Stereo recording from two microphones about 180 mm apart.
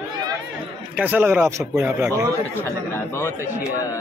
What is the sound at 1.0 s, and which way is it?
A man's voice, 10° right (ahead or behind).